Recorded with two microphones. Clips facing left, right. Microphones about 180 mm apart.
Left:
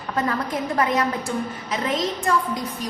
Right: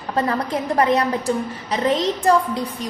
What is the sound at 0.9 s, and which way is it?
Speech, 30° right (ahead or behind).